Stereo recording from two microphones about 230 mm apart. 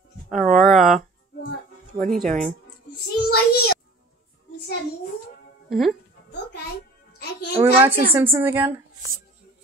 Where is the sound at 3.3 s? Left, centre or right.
Left.